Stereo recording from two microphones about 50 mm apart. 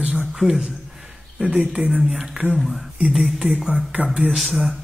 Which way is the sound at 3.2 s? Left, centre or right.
Centre.